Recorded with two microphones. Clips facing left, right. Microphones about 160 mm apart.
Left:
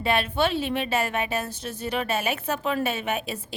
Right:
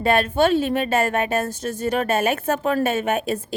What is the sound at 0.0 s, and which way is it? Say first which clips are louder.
A woman's voice: right 6 dB; 45° right (ahead or behind).